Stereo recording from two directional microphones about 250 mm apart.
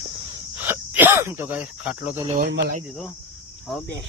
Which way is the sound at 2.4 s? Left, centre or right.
Right.